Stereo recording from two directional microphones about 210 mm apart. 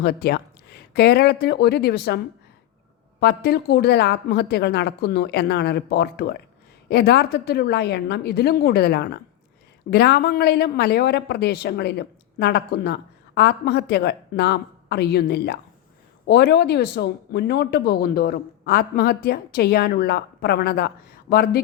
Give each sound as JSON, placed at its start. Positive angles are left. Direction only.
{"t": 0.0, "sound": "speech", "side_deg": 50}